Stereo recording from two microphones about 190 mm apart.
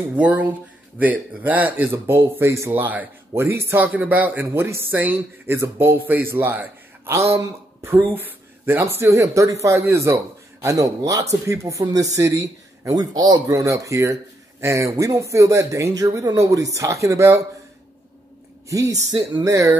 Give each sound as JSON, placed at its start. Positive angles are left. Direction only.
{"t": 0.1, "sound": "speech", "side_deg": -10}
{"t": 18.7, "sound": "speech", "side_deg": -15}